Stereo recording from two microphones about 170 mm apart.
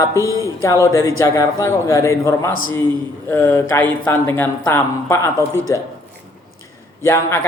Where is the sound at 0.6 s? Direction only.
15° left (ahead or behind).